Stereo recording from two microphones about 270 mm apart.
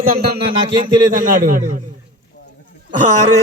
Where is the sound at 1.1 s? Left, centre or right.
Right.